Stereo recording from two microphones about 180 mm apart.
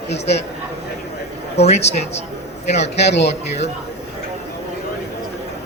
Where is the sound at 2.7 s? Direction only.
35° left (ahead or behind).